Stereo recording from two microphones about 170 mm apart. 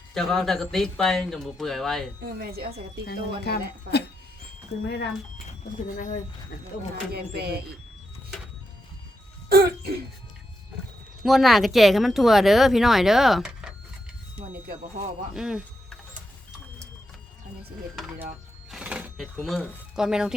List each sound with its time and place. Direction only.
0.1 s speech: centre (ahead or behind)
2.4 s speech: 65° right (ahead or behind)
3.1 s speech: 70° left (ahead or behind)
4.7 s speech: 35° left (ahead or behind)
5.9 s speech: 50° left (ahead or behind)
7.1 s speech: 65° right (ahead or behind)
9.5 s throat clearing: 70° right (ahead or behind)
11.2 s speech: centre (ahead or behind)
15.4 s speech: 5° right (ahead or behind)
18.7 s speech: 5° right (ahead or behind)